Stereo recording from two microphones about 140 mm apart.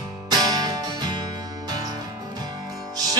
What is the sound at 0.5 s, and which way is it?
Music, 30° right (ahead or behind).